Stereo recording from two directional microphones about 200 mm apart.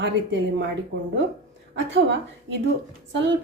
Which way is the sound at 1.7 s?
60° right (ahead or behind).